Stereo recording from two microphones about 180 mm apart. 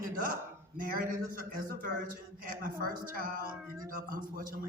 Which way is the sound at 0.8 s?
50° right (ahead or behind).